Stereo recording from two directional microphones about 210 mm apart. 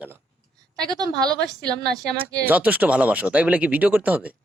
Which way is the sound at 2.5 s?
5° right (ahead or behind).